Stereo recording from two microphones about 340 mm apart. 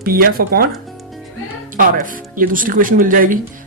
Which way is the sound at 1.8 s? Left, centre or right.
Right.